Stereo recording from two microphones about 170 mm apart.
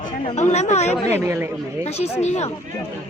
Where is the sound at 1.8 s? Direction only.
40° left (ahead or behind).